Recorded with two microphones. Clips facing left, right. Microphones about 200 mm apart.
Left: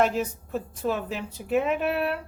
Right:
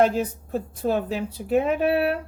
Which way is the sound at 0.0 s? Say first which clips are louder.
Right 3 dB; 35° right (ahead or behind).